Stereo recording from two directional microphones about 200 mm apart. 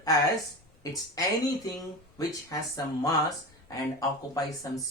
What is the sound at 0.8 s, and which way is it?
Speech, 15° left (ahead or behind).